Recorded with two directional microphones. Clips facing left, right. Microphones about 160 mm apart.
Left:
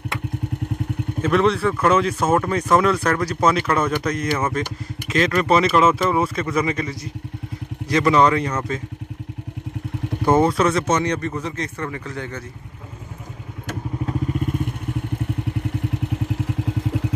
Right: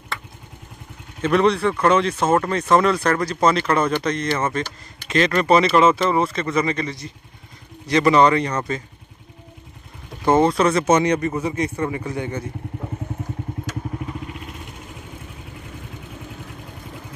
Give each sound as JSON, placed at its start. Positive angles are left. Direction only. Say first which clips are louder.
{"t": 1.2, "sound": "speech", "louder": "right 1 dB", "side_deg": 0}
{"t": 10.3, "sound": "speech", "louder": "right 1 dB", "side_deg": 5}
{"t": 10.9, "sound": "speech", "louder": "right 4 dB", "side_deg": -10}
{"t": 14.3, "sound": "vehicle", "louder": "left 11 dB", "side_deg": 50}
{"t": 15.8, "sound": "vehicle", "louder": "left 11 dB", "side_deg": 75}